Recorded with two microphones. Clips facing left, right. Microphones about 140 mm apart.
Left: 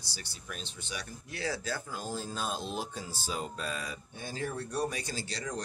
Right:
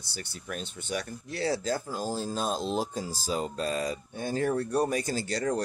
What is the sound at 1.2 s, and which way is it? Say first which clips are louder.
Speech: right 5 dB; 35° right (ahead or behind).